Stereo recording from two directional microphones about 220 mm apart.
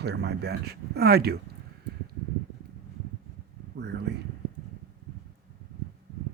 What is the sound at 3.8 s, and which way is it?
Speech, 50° right (ahead or behind).